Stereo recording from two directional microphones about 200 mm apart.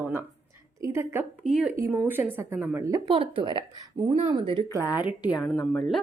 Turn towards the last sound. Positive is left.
turn(degrees=0)  # may be behind; listen again after turning